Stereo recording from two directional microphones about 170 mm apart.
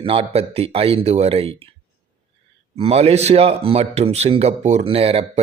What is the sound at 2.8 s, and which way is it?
A man's voice, 35° right (ahead or behind).